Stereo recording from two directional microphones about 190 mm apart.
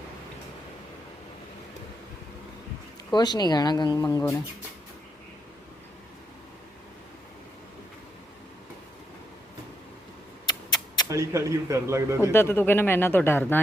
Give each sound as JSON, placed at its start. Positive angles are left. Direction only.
{"t": 3.1, "sound": "speech", "side_deg": 20}
{"t": 10.4, "sound": "a sound", "side_deg": 20}
{"t": 11.1, "sound": "speech", "side_deg": -15}
{"t": 12.3, "sound": "speech", "side_deg": 10}